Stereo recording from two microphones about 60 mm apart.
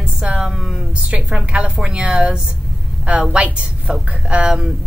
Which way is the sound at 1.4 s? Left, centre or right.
Centre.